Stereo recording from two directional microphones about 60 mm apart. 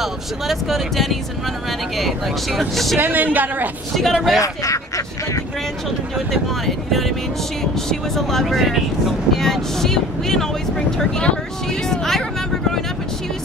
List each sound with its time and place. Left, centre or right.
0.0 s speech: centre
3.0 s a woman's voice: right
4.1 s speech: centre
4.4 s speech: left
6.1 s speech: centre